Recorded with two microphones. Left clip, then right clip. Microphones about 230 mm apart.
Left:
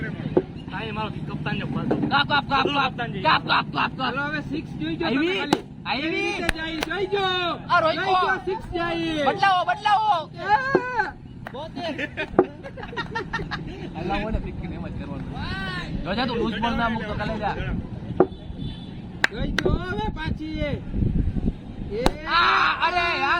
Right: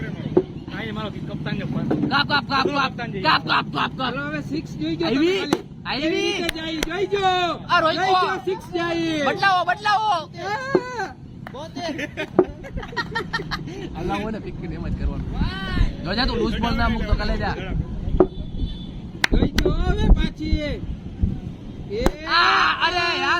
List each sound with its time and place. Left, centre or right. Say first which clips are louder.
1.0 s vehicle: even; centre
2.0 s speech: even; right
10.8 s a sound: left 1 dB; right
11.8 s speech: right 1 dB; right
15.4 s speech: right 1 dB; centre
16.0 s speech: right 2 dB; right
19.2 s speech: right 2 dB; right
22.3 s whimper: right 2 dB; right